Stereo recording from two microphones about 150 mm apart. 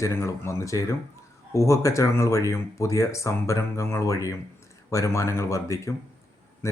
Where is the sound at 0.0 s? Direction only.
20° left (ahead or behind).